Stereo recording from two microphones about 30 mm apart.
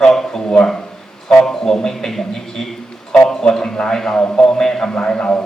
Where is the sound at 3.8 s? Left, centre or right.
Centre.